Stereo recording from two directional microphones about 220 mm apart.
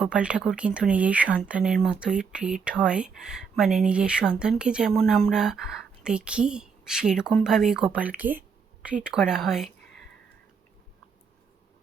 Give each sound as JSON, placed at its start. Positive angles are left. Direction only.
{"t": 0.0, "sound": "speech", "side_deg": -5}